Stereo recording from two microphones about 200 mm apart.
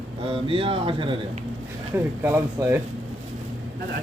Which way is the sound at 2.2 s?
10° right (ahead or behind).